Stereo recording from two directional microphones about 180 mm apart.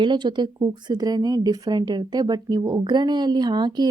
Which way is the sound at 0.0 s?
25° right (ahead or behind).